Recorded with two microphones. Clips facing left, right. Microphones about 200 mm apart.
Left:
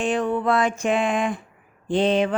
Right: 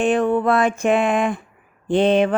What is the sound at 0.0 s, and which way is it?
Speech, 55° right (ahead or behind).